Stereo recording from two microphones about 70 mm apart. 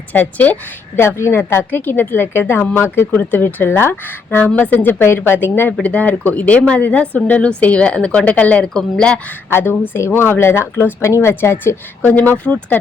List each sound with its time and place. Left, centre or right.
0.1 s a woman's voice: left
0.9 s speech: left
5.8 s a woman's voice: centre
9.5 s speech: left